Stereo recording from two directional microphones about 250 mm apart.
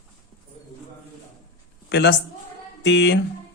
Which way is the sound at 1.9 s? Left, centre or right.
Left.